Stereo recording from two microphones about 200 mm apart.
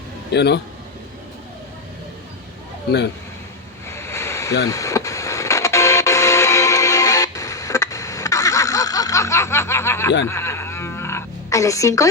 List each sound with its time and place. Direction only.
0.3 s a man's voice: 60° left (ahead or behind)
3.8 s a sound: 15° left (ahead or behind)
4.7 s radio: 15° left (ahead or behind)
10.2 s music: 15° left (ahead or behind)